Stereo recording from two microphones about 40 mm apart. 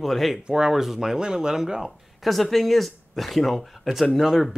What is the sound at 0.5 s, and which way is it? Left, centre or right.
Speech, centre.